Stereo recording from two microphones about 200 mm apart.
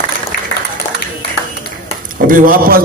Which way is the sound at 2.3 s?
45° right (ahead or behind).